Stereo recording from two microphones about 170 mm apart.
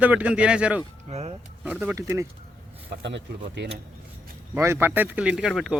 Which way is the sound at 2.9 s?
90° right.